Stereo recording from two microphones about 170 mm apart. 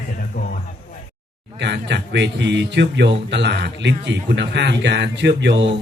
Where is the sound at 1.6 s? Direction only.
90° right.